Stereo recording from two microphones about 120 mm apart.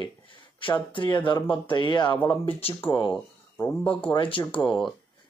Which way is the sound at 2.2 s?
50° left (ahead or behind).